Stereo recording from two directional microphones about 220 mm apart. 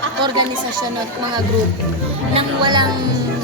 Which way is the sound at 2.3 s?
20° right (ahead or behind).